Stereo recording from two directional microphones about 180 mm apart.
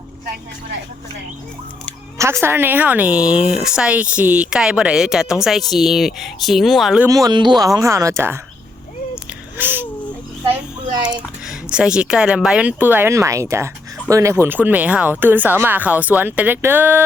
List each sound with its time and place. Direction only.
2.1 s speech: 15° right (ahead or behind)
7.1 s speech: 20° right (ahead or behind)
9.6 s speech: 10° right (ahead or behind)
11.4 s speech: 5° right (ahead or behind)